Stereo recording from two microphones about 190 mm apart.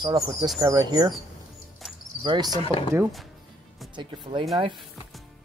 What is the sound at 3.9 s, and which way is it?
Speech, 25° right (ahead or behind).